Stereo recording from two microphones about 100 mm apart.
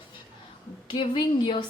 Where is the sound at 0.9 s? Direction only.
50° left (ahead or behind).